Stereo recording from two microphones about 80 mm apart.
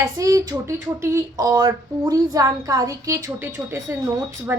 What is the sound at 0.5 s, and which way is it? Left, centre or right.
Speech, right.